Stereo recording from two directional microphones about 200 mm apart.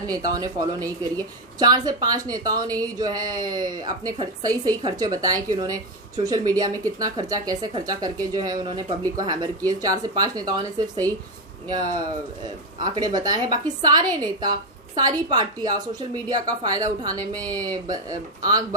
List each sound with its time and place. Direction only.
0.1 s a woman's voice: 20° right (ahead or behind)
12.8 s a woman's voice: 20° right (ahead or behind)